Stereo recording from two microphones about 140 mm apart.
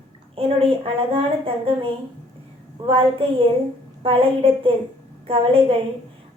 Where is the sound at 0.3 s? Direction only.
45° right (ahead or behind).